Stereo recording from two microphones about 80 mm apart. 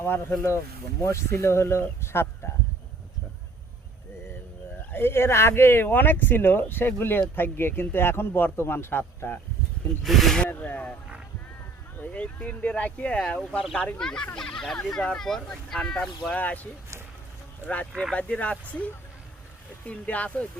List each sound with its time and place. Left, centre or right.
0.0 s speech: left
4.9 s speech: left
10.0 s speech: centre
10.5 s speech: left
11.9 s speech: centre
17.7 s speech: centre
19.9 s speech: centre